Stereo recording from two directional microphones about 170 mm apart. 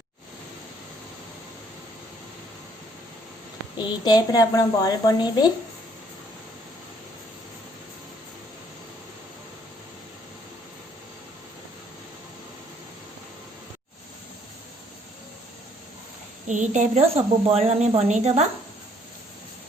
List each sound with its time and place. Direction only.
4.0 s a woman's voice: 25° left (ahead or behind)
16.5 s a woman's voice: 45° right (ahead or behind)